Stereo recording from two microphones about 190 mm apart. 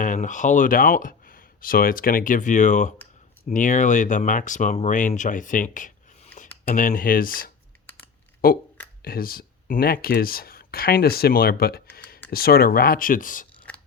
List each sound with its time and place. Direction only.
0.0 s speech: 40° left (ahead or behind)